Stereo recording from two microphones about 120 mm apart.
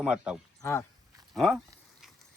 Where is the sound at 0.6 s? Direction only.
20° left (ahead or behind).